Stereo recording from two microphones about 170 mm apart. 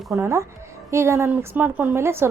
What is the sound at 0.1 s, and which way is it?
A woman's voice, 15° right (ahead or behind).